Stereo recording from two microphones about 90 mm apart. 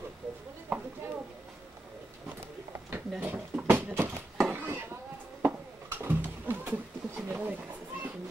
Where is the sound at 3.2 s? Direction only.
20° right (ahead or behind).